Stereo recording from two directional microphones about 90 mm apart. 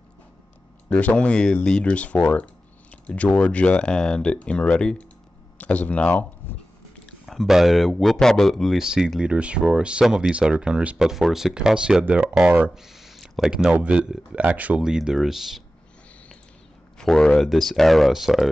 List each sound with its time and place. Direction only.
0.8 s speech: 15° left (ahead or behind)
7.1 s a sound: 5° left (ahead or behind)
7.4 s speech: centre (ahead or behind)
17.0 s speech: 5° left (ahead or behind)